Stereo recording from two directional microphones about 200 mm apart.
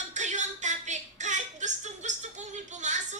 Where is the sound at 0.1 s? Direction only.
35° right (ahead or behind).